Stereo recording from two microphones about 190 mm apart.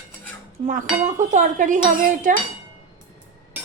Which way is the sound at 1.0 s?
40° right (ahead or behind).